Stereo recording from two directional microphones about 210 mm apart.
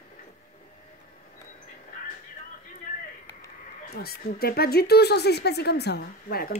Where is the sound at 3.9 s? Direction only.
45° left (ahead or behind).